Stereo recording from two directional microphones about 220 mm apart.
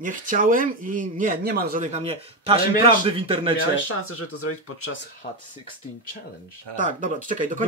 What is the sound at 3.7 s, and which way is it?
Speech, 75° left (ahead or behind).